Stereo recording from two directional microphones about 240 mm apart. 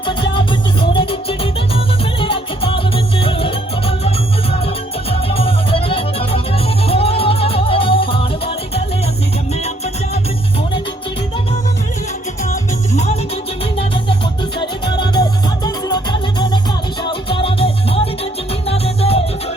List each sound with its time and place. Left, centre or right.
0.0 s music: left
5.3 s music: left
14.6 s music: centre